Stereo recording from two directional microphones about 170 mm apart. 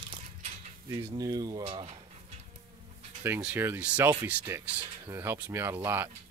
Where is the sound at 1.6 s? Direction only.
35° right (ahead or behind).